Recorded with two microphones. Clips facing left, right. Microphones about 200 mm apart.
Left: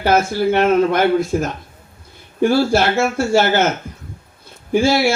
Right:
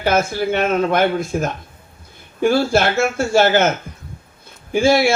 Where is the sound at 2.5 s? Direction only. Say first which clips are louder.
Even; 50° right (ahead or behind).